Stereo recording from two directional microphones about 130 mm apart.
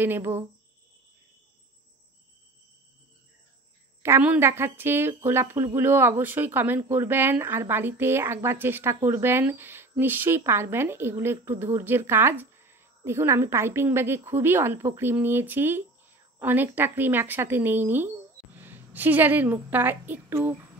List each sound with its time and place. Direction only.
0.0 s speech: 15° right (ahead or behind)
4.0 s speech: 15° right (ahead or behind)